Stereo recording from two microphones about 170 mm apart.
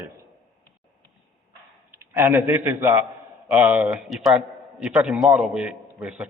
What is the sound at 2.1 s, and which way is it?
A man's voice, 10° right (ahead or behind).